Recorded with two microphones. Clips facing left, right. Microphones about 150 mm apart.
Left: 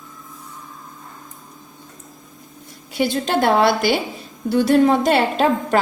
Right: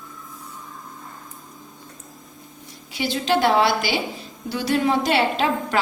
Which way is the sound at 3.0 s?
50° left (ahead or behind).